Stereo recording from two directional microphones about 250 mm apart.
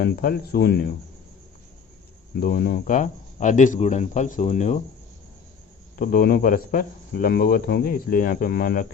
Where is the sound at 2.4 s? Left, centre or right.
Left.